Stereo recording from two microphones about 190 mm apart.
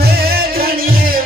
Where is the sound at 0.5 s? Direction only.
50° right (ahead or behind).